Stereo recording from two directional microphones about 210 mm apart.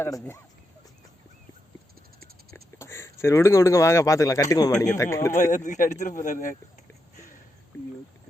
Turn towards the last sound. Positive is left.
turn(degrees=40)  # may be behind; listen again after turning